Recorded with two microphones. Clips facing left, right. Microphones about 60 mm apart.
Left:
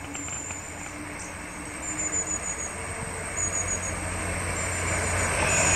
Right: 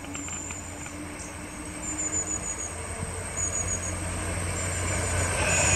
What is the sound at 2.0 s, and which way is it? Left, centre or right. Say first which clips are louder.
Vehicle: left 2 dB; left.